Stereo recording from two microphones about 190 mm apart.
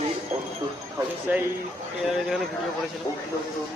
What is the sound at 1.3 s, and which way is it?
Speech, 10° right (ahead or behind).